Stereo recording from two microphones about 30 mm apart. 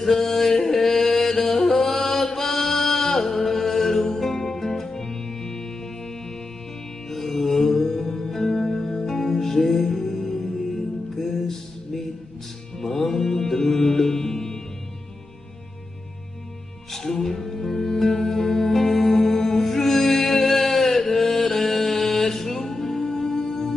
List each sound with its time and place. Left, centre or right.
0.0 s music: centre
0.7 s chant: centre
3.4 s music: centre
16.9 s music: centre